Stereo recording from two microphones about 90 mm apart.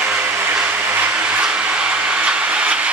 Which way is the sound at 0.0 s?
20° right (ahead or behind).